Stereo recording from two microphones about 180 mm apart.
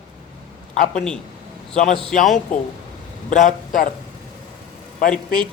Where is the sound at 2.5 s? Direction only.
50° left (ahead or behind).